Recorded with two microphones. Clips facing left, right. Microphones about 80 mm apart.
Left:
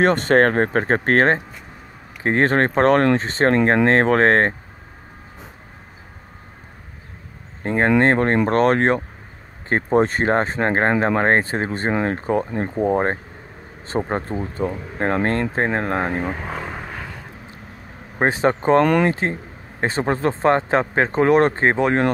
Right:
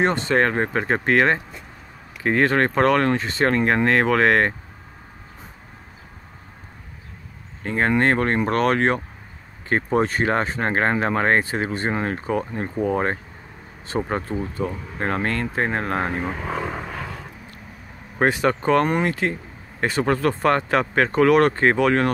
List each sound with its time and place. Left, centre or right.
0.0 s speech: left
7.6 s speech: left
16.4 s vehicle: centre
18.2 s speech: left